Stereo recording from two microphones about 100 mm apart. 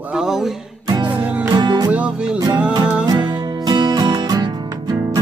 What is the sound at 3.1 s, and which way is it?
Music, 45° right (ahead or behind).